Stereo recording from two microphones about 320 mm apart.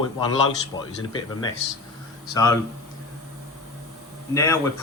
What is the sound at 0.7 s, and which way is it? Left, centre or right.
Speech, centre.